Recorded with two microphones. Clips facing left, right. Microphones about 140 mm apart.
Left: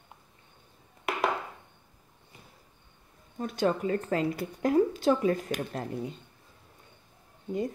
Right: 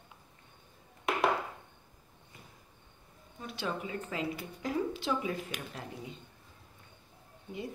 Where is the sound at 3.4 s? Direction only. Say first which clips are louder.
Left 9 dB; 45° left (ahead or behind).